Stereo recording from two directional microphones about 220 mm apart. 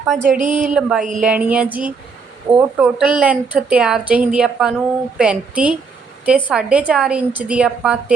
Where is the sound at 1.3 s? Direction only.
5° right (ahead or behind).